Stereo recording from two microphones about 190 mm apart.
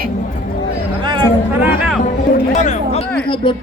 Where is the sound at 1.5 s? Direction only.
10° right (ahead or behind).